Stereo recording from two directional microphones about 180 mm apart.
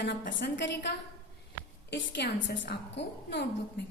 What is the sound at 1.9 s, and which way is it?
A woman's voice, 80° left.